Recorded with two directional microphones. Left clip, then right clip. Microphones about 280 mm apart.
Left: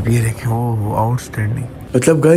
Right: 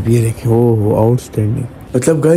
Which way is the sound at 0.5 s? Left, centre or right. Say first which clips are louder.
Right 11 dB; right.